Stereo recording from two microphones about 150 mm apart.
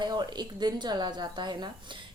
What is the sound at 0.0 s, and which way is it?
A woman's voice, 30° right (ahead or behind).